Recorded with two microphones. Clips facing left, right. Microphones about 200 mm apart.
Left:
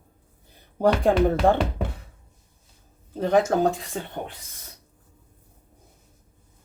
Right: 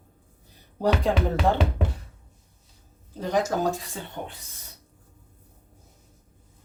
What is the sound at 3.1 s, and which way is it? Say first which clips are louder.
Speech: left 5 dB; 55° left (ahead or behind).